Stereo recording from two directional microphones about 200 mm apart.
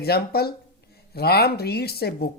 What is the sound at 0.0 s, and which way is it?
Speech, 50° left (ahead or behind).